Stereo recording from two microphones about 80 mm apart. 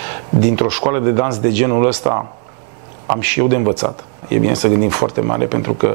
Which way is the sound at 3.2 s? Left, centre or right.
Right.